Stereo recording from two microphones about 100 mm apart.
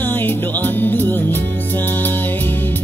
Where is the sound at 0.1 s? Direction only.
20° left (ahead or behind).